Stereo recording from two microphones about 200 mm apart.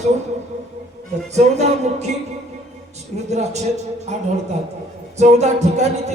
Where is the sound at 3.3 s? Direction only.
35° right (ahead or behind).